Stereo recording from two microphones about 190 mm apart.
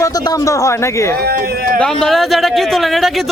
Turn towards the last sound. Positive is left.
turn(degrees=0)  # may be behind; listen again after turning